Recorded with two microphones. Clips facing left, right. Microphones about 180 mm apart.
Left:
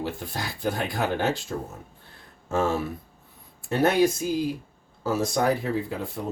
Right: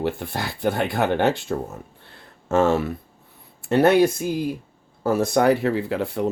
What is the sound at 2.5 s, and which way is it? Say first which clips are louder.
Speech: right 6 dB; 75° right (ahead or behind).